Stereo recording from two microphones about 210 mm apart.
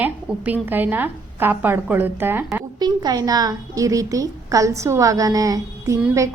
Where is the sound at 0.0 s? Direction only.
10° right (ahead or behind).